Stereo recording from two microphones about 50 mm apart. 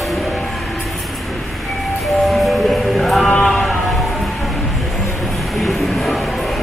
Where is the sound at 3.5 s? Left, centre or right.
Centre.